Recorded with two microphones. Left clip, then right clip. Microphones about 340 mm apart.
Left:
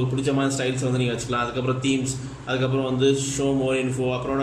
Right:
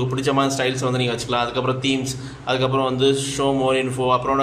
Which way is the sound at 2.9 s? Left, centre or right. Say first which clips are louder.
Right 2 dB; centre.